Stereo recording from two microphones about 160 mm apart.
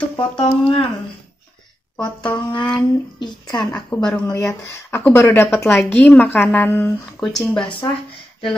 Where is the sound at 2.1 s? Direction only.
30° left (ahead or behind).